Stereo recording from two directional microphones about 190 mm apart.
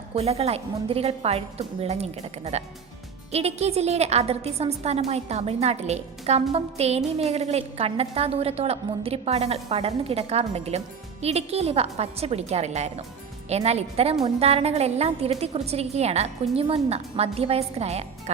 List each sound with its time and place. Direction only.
0.1 s a woman's voice: 30° right (ahead or behind)